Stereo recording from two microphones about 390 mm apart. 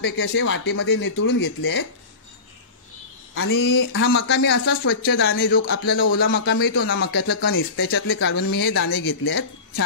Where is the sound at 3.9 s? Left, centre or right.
Left.